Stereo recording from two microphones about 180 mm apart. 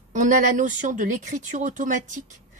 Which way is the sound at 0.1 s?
45° right (ahead or behind).